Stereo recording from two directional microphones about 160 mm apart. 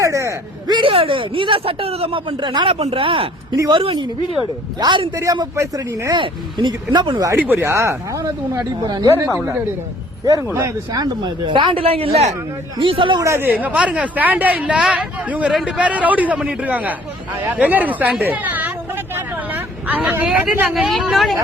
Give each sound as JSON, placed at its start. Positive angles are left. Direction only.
{"t": 0.0, "sound": "a sound", "side_deg": -20}
{"t": 0.8, "sound": "a man's voice", "side_deg": -35}
{"t": 7.3, "sound": "speech", "side_deg": -10}
{"t": 13.2, "sound": "speech", "side_deg": -15}